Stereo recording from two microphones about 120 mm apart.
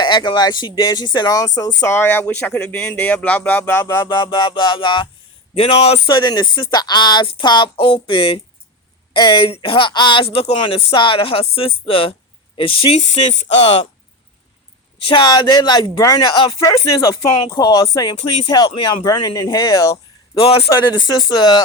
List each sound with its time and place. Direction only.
0.0 s speech: 40° left (ahead or behind); by 4.1 s 20° left (ahead or behind)
4.1 s speech: 35° left (ahead or behind)
5.5 s speech: 55° left (ahead or behind)
6.1 s speech: 40° left (ahead or behind)
10.4 s speech: 60° left (ahead or behind)
10.9 s speech: 45° left (ahead or behind)
13.0 s speech: 70° left (ahead or behind)
15.0 s speech: 40° left (ahead or behind)
20.4 s speech: 55° left (ahead or behind)
20.7 s speech: 30° left (ahead or behind)